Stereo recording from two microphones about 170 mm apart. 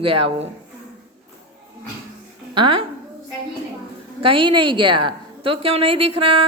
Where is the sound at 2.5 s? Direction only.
30° right (ahead or behind).